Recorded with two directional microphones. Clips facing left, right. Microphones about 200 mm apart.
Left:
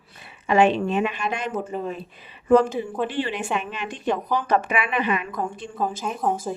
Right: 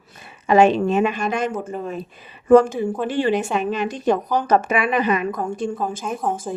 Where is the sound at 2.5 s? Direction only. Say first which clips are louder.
Right 4 dB; 45° right (ahead or behind).